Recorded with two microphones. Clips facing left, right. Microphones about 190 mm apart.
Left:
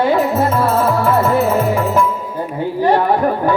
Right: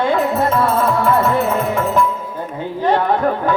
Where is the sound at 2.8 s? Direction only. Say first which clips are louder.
Left 2 dB; 10° left (ahead or behind).